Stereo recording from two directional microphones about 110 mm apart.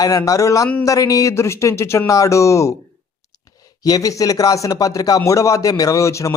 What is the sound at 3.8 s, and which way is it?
Speech, 30° left (ahead or behind).